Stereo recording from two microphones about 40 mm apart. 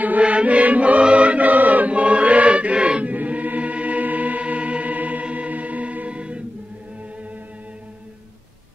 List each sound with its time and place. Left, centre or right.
0.2 s choir: right
5.2 s music: right